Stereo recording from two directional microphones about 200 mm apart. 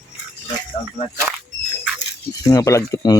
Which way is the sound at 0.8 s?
25° left (ahead or behind).